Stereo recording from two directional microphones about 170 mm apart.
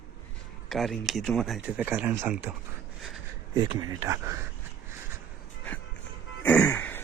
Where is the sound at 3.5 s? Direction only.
20° right (ahead or behind).